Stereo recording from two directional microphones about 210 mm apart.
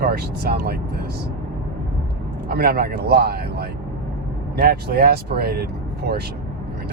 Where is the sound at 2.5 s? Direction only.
45° right (ahead or behind).